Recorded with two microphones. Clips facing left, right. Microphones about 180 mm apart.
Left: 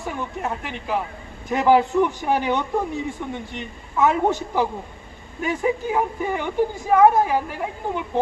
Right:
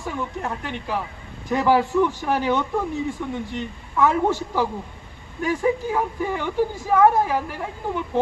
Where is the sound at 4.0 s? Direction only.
20° left (ahead or behind).